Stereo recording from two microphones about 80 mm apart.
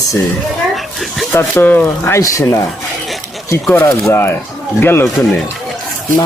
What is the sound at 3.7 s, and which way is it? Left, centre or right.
Speech, left.